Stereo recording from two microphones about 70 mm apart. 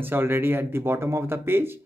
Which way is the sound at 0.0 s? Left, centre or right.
Right.